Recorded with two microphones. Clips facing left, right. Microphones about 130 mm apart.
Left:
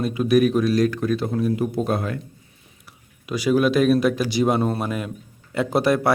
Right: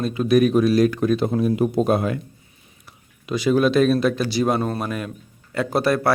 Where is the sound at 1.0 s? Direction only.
20° right (ahead or behind).